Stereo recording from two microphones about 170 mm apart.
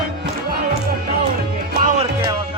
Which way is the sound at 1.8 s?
40° right (ahead or behind).